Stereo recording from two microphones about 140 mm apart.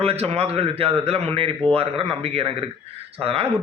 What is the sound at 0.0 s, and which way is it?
Speech, 45° right (ahead or behind).